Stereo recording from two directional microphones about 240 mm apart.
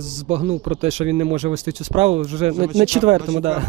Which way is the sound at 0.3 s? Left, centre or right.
Right.